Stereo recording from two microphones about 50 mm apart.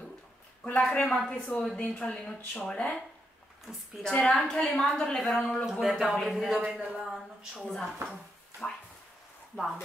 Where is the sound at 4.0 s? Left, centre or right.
Centre.